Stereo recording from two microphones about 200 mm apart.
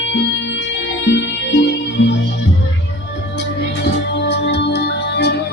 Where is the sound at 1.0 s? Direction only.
60° left (ahead or behind).